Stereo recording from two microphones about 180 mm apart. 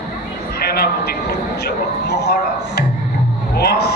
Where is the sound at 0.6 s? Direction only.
60° left (ahead or behind).